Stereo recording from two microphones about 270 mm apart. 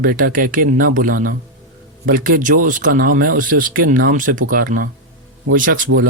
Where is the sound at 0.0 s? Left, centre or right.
Right.